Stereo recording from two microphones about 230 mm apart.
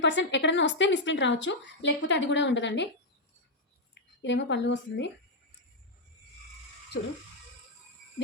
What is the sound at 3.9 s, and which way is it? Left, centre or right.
A woman's voice, left.